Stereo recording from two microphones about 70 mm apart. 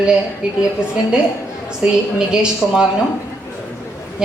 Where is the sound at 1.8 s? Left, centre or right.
Centre.